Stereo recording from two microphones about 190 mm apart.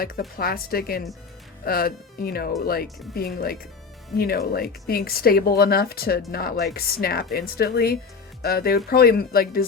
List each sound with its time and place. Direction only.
0.0 s speech: 50° left (ahead or behind)